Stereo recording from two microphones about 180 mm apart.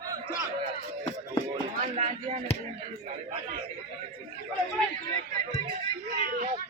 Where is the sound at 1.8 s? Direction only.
40° right (ahead or behind).